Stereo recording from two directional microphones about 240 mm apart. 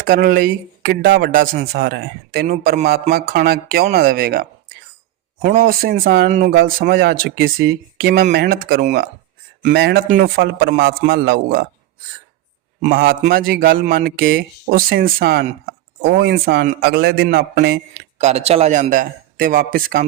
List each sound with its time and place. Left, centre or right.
0.0 s speech: right
12.8 s speech: right